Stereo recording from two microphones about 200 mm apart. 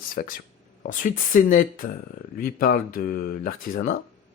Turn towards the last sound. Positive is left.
turn(degrees=40)  # may be behind; listen again after turning